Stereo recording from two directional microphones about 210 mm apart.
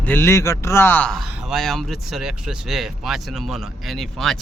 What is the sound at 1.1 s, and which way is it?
Speech, centre (ahead or behind).